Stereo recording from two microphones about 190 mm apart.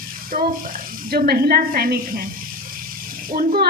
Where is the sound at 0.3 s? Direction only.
45° right (ahead or behind).